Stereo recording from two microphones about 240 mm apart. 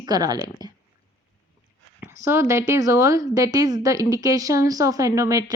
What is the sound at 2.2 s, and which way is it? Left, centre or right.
A woman's voice, centre.